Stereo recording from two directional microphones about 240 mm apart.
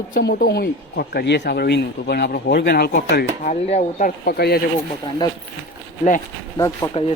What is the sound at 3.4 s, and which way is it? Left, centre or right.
A woman's voice, left.